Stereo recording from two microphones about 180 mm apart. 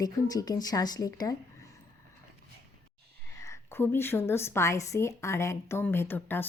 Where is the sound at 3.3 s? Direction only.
15° left (ahead or behind).